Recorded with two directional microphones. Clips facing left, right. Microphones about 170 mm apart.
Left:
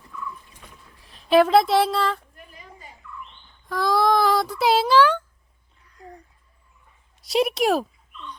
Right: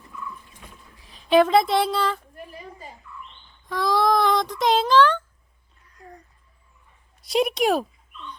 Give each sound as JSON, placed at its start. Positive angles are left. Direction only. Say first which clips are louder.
{"t": 0.9, "sound": "speech", "louder": "even", "side_deg": 0}
{"t": 2.4, "sound": "a sound", "louder": "right 6 dB", "side_deg": -30}
{"t": 3.7, "sound": "speech", "louder": "left 1 dB", "side_deg": 0}
{"t": 7.2, "sound": "speech", "louder": "even", "side_deg": 0}